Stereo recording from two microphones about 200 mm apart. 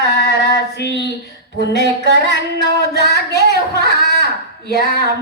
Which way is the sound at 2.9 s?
55° left (ahead or behind).